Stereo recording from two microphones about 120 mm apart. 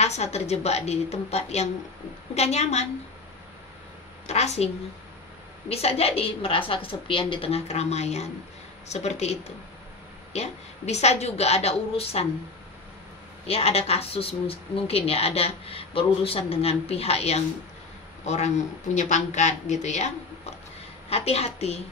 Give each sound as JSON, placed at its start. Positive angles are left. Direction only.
{"t": 0.0, "sound": "a woman's voice", "side_deg": 65}
{"t": 4.3, "sound": "a woman's voice", "side_deg": 65}
{"t": 5.7, "sound": "a woman's voice", "side_deg": 55}
{"t": 13.5, "sound": "a woman's voice", "side_deg": 55}
{"t": 18.2, "sound": "a man's voice", "side_deg": 70}
{"t": 21.1, "sound": "a woman's voice", "side_deg": 60}